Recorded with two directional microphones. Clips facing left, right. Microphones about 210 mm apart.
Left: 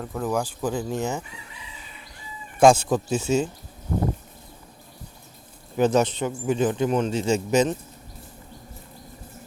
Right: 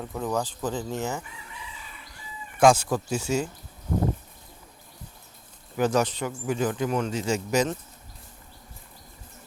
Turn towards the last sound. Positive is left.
turn(degrees=20)  # may be behind; listen again after turning